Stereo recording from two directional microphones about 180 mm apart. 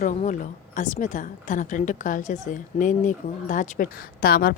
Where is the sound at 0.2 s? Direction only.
45° left (ahead or behind).